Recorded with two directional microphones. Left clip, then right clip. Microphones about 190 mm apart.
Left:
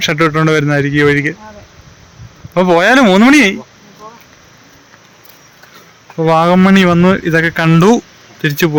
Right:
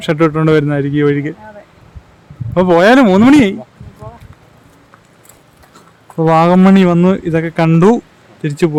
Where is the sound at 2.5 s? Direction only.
5° right (ahead or behind).